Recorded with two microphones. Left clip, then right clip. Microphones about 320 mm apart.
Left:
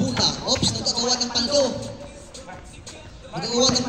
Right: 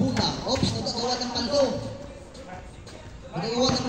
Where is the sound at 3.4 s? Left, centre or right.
Left.